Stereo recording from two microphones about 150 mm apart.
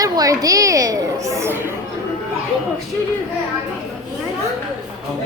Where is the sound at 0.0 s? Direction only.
25° right (ahead or behind).